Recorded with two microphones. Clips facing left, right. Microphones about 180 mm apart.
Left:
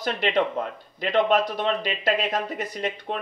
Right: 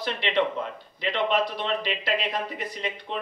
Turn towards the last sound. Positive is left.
turn(degrees=45)  # may be behind; listen again after turning